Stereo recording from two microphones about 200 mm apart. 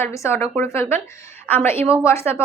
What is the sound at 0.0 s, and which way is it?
Speech, 15° left (ahead or behind).